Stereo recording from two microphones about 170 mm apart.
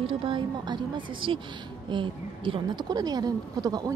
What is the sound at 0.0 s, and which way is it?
Speech, 30° right (ahead or behind).